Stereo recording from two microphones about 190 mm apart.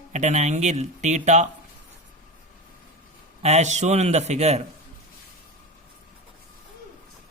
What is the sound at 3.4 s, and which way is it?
Speech, 35° right (ahead or behind).